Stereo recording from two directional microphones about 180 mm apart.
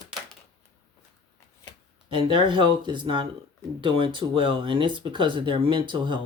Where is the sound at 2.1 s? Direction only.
30° right (ahead or behind).